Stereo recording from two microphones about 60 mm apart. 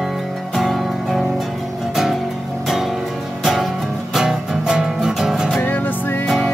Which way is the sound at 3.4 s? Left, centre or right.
Centre.